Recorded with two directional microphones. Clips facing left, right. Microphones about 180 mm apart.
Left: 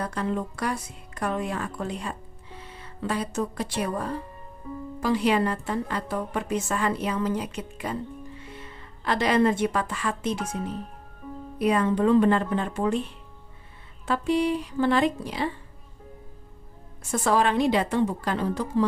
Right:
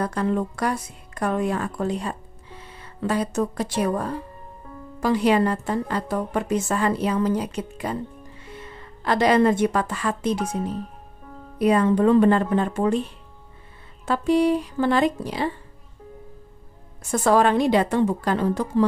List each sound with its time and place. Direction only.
0.0 s a woman's voice: 45° right (ahead or behind)
5.0 s a woman's voice: 45° right (ahead or behind)
9.0 s a woman's voice: 40° right (ahead or behind)
14.0 s a woman's voice: 45° right (ahead or behind)
17.2 s a woman's voice: 45° right (ahead or behind)